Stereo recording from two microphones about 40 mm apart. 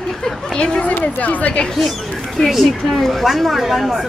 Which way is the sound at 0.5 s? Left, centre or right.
Left.